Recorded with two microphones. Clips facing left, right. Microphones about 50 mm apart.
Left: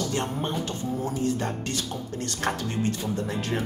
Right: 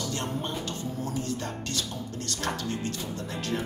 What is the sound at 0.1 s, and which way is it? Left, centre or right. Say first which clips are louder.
Speech: left 4 dB; left.